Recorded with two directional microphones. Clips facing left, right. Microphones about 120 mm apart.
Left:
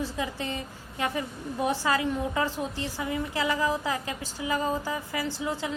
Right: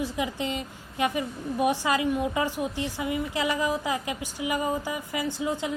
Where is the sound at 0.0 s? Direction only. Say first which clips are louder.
Right 2 dB; 20° right (ahead or behind).